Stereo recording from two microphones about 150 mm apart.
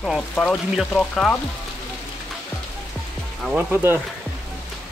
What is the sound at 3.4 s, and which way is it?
Speech, 10° right (ahead or behind).